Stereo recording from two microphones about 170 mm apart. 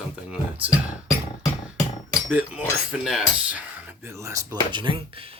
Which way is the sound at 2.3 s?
10° right (ahead or behind).